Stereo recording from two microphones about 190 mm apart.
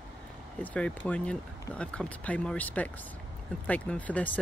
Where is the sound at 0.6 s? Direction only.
5° left (ahead or behind).